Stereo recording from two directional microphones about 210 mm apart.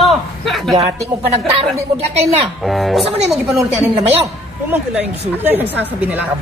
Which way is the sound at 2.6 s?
Centre (ahead or behind).